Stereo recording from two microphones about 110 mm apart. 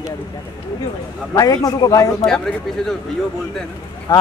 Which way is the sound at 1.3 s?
35° left (ahead or behind).